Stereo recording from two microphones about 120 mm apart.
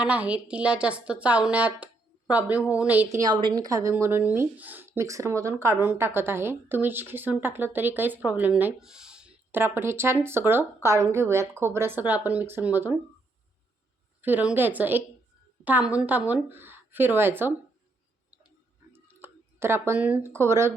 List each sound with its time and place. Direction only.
0.0 s speech: 10° right (ahead or behind)
3.2 s a woman's voice: 35° right (ahead or behind); by 13.0 s 15° right (ahead or behind)
14.2 s speech: 15° right (ahead or behind)
18.9 s a sound: 20° right (ahead or behind)
20.2 s a woman's voice: 20° right (ahead or behind)